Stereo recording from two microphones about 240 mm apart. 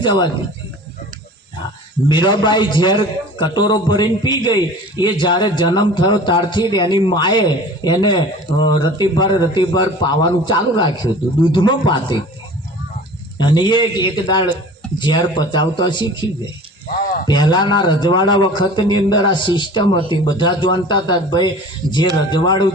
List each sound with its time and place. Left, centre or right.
0.0 s a man's voice: centre
2.0 s a man's voice: centre
13.4 s a man's voice: centre